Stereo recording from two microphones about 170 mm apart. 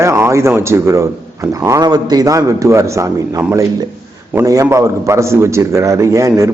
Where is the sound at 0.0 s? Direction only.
15° right (ahead or behind).